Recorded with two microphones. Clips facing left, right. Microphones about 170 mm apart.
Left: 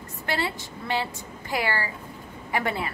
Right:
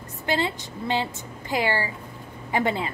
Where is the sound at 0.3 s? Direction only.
20° right (ahead or behind).